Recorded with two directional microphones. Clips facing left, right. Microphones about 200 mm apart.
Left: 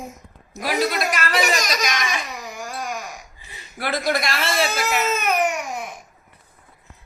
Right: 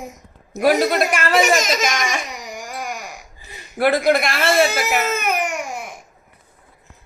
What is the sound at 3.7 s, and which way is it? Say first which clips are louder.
Speech: right 7 dB; 55° right (ahead or behind).